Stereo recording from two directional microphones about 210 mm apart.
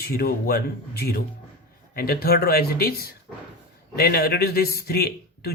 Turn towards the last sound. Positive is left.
turn(degrees=45)  # may be behind; listen again after turning